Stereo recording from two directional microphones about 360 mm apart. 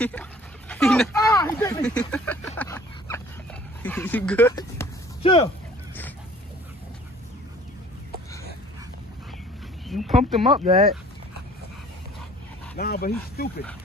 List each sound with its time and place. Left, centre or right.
0.0 s dog: centre
3.8 s speech: centre
9.8 s a sound: centre
10.5 s speech: centre
12.7 s speech: left